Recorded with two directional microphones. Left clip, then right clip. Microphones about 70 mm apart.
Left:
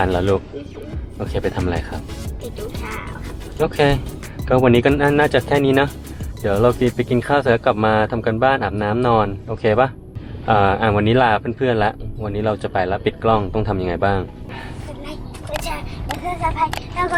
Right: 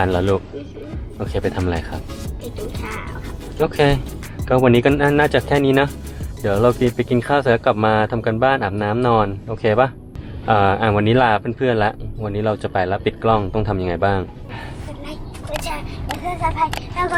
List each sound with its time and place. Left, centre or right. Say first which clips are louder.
0.0 s a man's voice: even; right
1.5 s speech: even; centre
2.8 s speech: even; centre
3.8 s a man's voice: left 1 dB; right
15.0 s a sound: right 1 dB; centre